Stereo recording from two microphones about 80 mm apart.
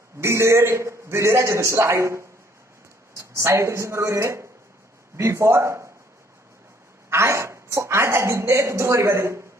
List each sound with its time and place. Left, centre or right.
0.2 s a man's voice: right
7.1 s a woman's voice: right